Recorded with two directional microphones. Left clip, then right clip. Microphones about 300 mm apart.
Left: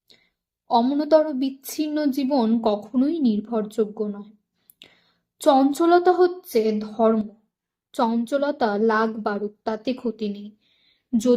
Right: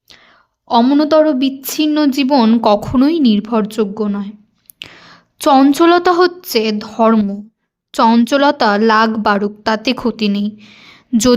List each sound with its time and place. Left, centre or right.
0.8 s speech: right
5.4 s speech: right
10.8 s a sound: right